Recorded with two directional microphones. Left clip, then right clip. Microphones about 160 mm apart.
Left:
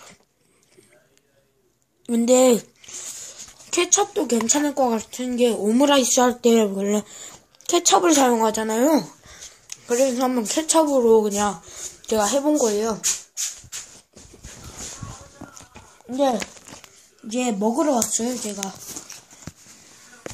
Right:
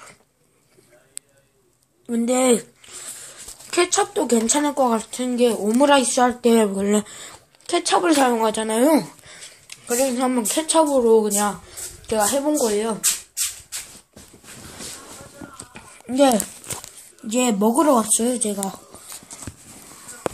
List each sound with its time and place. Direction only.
2.0 s zipper: 45° left (ahead or behind); by 3.9 s 25° left (ahead or behind)
3.9 s speech: 10° left (ahead or behind)
5.7 s speech: 30° left (ahead or behind)
6.4 s speech: 15° left (ahead or behind)
6.8 s speech: 5° right (ahead or behind)
7.6 s speech: 25° left (ahead or behind)
15.7 s a sound: 40° right (ahead or behind)
17.3 s speech: 20° right (ahead or behind)